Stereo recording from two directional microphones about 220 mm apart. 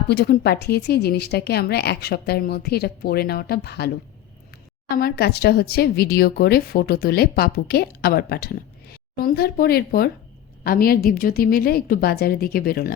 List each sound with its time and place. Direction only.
0.1 s speech: 50° left (ahead or behind)
4.9 s speech: 45° left (ahead or behind)